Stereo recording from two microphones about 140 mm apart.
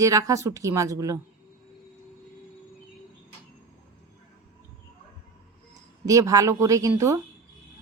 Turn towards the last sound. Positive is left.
turn(degrees=-20)  # may be behind; listen again after turning